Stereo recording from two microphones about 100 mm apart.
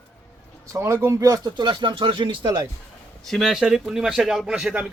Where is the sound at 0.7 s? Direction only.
30° right (ahead or behind).